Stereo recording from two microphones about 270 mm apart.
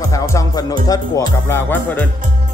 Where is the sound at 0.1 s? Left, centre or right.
Centre.